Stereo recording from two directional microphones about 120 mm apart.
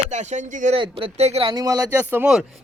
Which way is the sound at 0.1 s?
75° right (ahead or behind).